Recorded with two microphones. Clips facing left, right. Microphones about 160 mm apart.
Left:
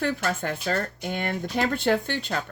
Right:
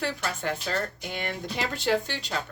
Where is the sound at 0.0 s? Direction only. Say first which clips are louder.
Left 4 dB; 50° left (ahead or behind).